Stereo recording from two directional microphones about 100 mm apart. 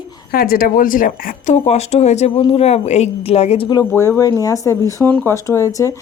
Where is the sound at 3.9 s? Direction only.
30° left (ahead or behind).